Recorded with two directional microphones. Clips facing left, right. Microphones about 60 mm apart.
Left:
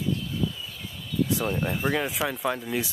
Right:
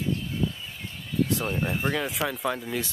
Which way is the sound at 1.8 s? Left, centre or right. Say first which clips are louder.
Left 3 dB; centre.